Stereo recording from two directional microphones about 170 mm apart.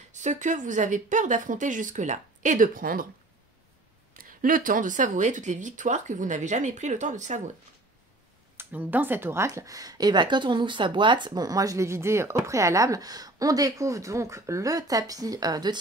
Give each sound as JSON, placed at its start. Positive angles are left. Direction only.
{"t": 0.2, "sound": "speech", "side_deg": -45}
{"t": 4.1, "sound": "speech", "side_deg": -55}
{"t": 8.5, "sound": "speech", "side_deg": -10}